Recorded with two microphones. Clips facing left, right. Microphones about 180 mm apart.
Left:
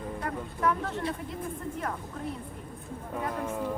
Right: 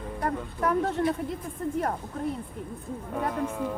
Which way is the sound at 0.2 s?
40° right (ahead or behind).